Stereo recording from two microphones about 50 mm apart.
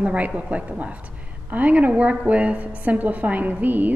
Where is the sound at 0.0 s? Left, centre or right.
Right.